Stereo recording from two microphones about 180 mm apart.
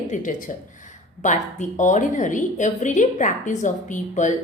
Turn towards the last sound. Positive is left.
turn(degrees=40)  # may be behind; listen again after turning